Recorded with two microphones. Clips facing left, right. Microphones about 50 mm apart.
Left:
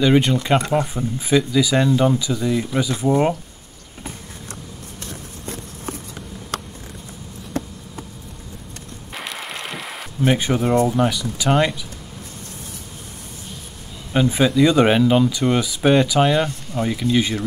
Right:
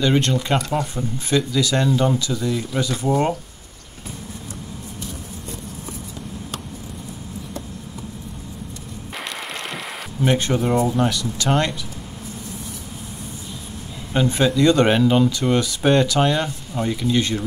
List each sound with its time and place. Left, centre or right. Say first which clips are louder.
0.0 s speech: left 3 dB; centre
5.0 s vehicle: left 3 dB; left
9.2 s mechanisms: even; centre
10.2 s speech: left 1 dB; centre
14.1 s speech: left 2 dB; centre